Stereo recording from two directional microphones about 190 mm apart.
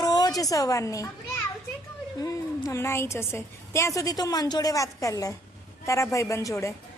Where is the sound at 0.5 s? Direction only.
15° left (ahead or behind).